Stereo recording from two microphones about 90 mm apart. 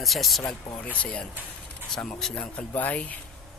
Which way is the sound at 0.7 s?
15° left (ahead or behind).